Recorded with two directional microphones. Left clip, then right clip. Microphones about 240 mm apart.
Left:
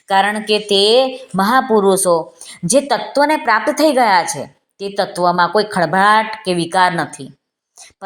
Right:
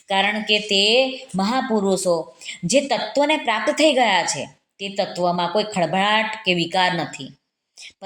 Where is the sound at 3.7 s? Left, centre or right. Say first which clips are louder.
Left 2 dB; left.